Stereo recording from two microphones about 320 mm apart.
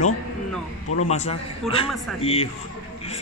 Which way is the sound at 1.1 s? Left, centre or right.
Centre.